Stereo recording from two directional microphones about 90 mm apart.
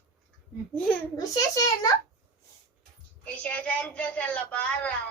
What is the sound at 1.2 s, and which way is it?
Speech, 45° left (ahead or behind).